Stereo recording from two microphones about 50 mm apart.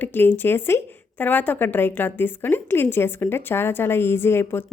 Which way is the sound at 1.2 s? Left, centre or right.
Left.